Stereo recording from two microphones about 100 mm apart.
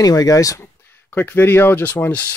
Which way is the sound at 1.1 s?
20° left (ahead or behind).